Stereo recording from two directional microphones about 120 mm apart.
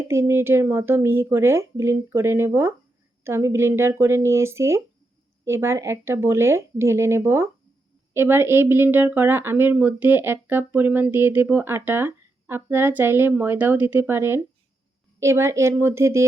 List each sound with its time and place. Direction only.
0.1 s speech: 20° right (ahead or behind)